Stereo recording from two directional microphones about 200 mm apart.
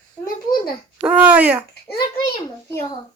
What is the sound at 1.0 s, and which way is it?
Speech, 5° right (ahead or behind).